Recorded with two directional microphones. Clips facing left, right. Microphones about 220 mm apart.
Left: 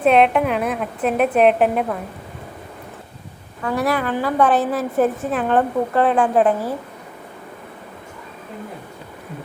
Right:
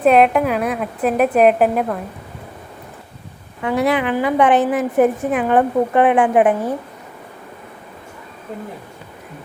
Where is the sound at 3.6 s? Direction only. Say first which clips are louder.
Right 3 dB; 20° right (ahead or behind).